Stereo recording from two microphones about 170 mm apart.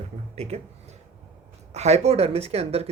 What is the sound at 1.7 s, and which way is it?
Speech, 40° right (ahead or behind).